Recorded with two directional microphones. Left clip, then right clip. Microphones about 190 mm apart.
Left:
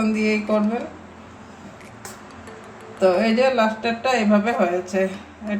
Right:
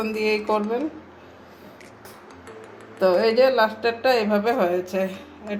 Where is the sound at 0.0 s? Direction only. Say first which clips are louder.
Left 1 dB; 45° right (ahead or behind).